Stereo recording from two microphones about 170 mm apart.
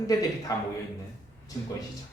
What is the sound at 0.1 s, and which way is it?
Speech, 20° left (ahead or behind).